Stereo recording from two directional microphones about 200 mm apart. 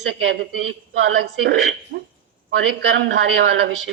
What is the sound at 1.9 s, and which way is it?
Speech, 50° right (ahead or behind).